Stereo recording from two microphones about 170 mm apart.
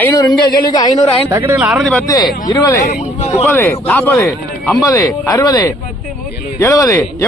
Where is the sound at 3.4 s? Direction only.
15° left (ahead or behind).